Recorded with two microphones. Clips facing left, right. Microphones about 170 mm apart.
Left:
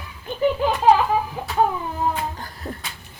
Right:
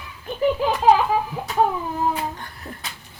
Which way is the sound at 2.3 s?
35° left (ahead or behind).